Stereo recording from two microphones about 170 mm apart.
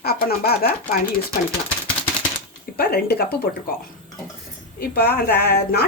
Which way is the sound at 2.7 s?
65° left (ahead or behind).